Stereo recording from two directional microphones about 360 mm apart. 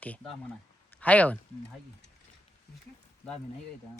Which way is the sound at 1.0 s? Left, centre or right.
Centre.